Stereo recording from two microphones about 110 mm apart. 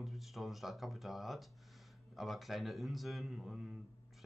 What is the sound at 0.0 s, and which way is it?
Speech, centre (ahead or behind).